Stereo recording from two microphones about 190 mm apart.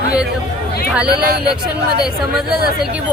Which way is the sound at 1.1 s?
20° left (ahead or behind).